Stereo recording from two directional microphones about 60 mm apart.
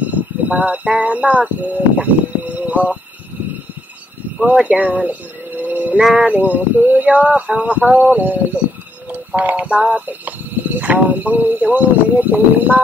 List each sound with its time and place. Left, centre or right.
0.1 s a sound: right
0.9 s speech: right
4.6 s speech: right
5.6 s music: right
6.1 s speech: right